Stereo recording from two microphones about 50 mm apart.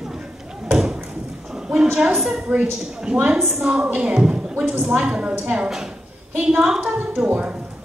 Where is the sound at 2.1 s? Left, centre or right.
Centre.